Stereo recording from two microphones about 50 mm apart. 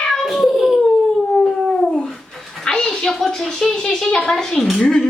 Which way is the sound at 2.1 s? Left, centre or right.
Centre.